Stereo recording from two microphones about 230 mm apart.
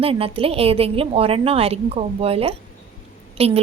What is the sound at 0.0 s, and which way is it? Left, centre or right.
A woman's voice, right.